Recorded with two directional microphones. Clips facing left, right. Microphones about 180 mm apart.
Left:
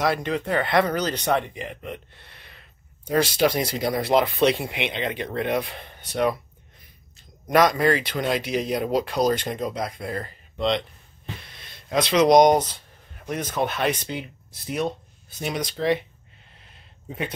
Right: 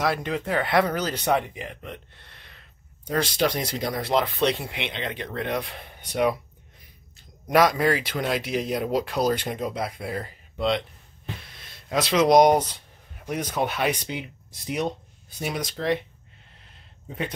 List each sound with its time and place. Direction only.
0.0 s speech: centre (ahead or behind)
2.1 s a sound: 5° left (ahead or behind)
3.1 s speech: 10° left (ahead or behind)
5.8 s speech: 10° right (ahead or behind)
7.4 s speech: 5° right (ahead or behind)
14.7 s a sound: 15° right (ahead or behind)
15.4 s speech: 5° right (ahead or behind)